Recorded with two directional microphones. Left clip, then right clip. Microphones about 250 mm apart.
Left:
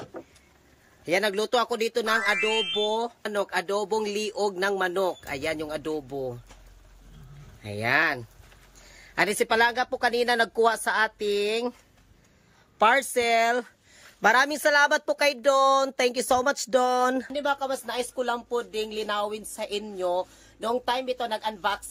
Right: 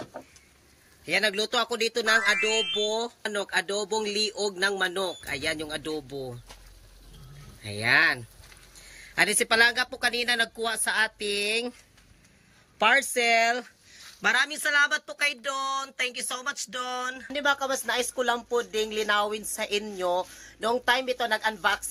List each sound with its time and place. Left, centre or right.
1.0 s speech: centre
2.4 s speech: centre
3.0 s speech: centre
7.6 s speech: centre
12.7 s speech: centre
17.3 s speech: centre